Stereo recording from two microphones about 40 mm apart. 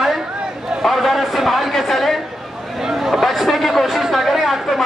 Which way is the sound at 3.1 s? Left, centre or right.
Centre.